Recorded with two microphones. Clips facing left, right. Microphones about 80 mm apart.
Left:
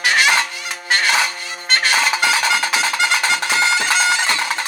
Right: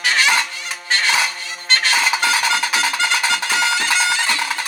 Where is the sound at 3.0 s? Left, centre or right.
Left.